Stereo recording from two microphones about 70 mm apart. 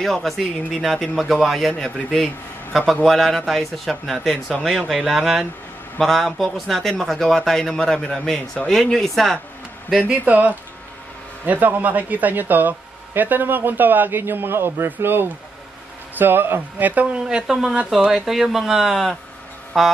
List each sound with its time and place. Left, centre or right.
0.0 s a man's voice: centre
10.0 s a man's voice: right; by 19.9 s centre